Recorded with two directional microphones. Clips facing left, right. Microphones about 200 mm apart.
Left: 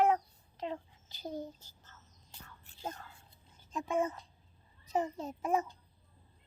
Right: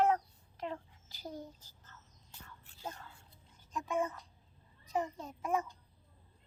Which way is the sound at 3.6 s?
30° left (ahead or behind).